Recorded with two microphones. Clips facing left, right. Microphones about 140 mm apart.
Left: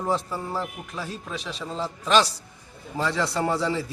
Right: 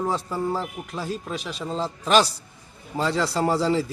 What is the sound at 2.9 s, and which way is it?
Speech, 25° right (ahead or behind).